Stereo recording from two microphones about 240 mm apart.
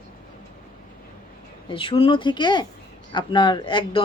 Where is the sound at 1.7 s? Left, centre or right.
Left.